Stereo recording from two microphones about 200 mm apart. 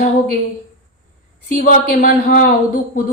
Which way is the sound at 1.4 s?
40° left (ahead or behind).